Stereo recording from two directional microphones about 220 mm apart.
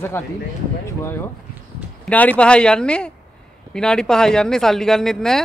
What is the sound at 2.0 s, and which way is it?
Speech, 5° left (ahead or behind).